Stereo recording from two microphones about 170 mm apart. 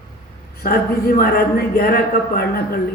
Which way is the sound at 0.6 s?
60° left (ahead or behind).